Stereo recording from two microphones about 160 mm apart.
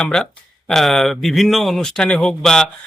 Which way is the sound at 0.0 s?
5° left (ahead or behind).